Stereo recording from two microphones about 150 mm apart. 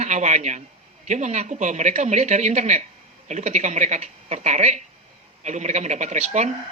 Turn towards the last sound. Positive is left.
turn(degrees=-50)  # may be behind; listen again after turning